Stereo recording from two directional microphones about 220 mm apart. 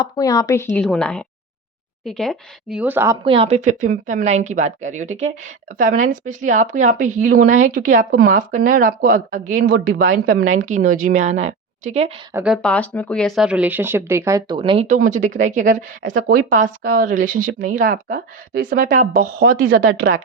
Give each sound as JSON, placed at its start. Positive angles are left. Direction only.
{"t": 0.0, "sound": "a woman's voice", "side_deg": 15}
{"t": 3.2, "sound": "speech", "side_deg": -25}
{"t": 12.3, "sound": "speech", "side_deg": -5}
{"t": 12.6, "sound": "speech", "side_deg": 5}